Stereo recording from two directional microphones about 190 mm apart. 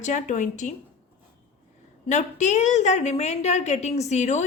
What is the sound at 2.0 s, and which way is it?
A woman's voice, 40° left (ahead or behind).